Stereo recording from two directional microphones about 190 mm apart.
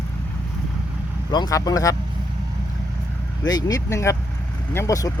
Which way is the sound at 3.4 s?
20° left (ahead or behind).